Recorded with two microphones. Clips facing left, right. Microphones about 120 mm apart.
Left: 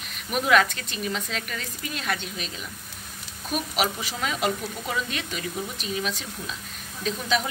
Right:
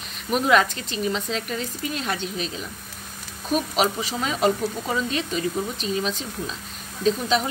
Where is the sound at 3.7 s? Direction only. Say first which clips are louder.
Right 4 dB; 35° right (ahead or behind).